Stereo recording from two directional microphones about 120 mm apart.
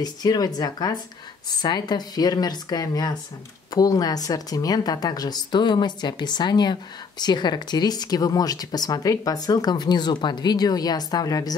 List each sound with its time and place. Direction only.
0.0 s a woman's voice: 35° left (ahead or behind)